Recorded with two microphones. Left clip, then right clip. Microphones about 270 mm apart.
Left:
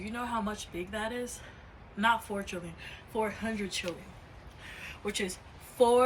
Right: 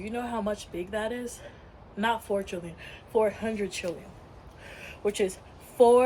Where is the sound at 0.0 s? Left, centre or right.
Centre.